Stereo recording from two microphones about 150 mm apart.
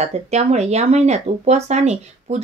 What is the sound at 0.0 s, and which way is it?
A woman's voice, 50° right (ahead or behind).